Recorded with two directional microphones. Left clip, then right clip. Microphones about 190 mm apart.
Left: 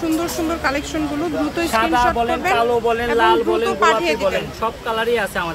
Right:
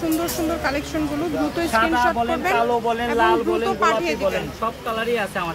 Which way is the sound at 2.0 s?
5° left (ahead or behind).